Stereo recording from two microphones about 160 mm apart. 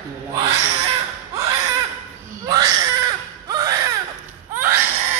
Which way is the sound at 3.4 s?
25° right (ahead or behind).